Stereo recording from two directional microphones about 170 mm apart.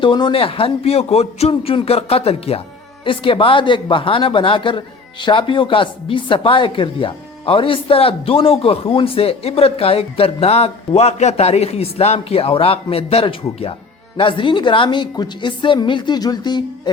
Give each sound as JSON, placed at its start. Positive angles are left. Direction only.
{"t": 0.0, "sound": "a woman's voice", "side_deg": 30}